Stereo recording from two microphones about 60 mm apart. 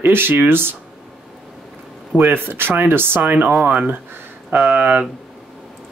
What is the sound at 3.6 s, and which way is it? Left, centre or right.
Speech, right.